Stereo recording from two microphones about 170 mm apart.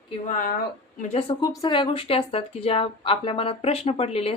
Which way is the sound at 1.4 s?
25° left (ahead or behind).